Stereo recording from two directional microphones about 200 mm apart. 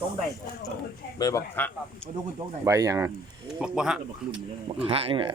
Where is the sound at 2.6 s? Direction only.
15° right (ahead or behind).